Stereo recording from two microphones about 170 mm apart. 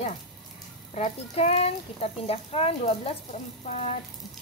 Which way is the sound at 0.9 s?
40° left (ahead or behind).